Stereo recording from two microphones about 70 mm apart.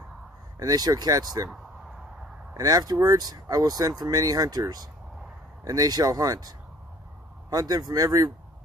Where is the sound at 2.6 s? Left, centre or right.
Right.